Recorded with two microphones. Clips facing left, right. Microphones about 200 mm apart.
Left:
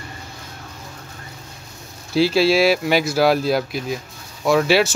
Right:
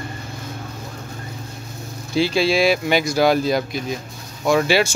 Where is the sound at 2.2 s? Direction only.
5° left (ahead or behind).